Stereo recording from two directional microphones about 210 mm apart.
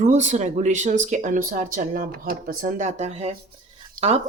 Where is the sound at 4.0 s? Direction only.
40° right (ahead or behind).